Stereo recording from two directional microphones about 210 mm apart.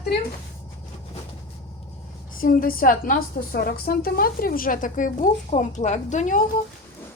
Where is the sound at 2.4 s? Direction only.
45° left (ahead or behind).